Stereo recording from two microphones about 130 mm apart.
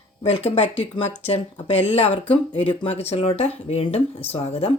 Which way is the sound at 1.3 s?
50° left (ahead or behind).